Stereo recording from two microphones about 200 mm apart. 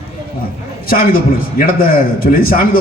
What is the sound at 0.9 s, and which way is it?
A man's voice, 45° left (ahead or behind).